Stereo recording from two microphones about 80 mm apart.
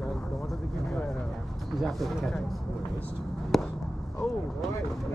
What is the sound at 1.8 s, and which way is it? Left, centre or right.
Speech, centre.